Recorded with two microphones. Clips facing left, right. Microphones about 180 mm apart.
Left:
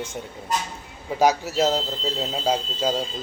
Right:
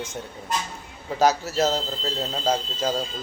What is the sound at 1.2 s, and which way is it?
Speech, 15° left (ahead or behind).